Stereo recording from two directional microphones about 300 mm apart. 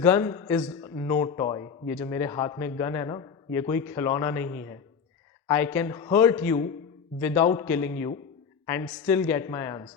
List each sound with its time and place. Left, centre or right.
0.0 s a man's voice: centre